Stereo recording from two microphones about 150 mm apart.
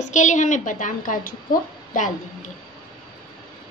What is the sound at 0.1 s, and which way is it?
A woman's voice, 55° left (ahead or behind).